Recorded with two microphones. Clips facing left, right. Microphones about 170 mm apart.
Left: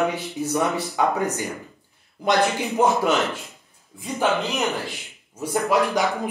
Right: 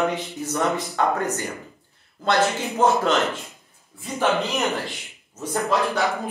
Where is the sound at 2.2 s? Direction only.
15° left (ahead or behind).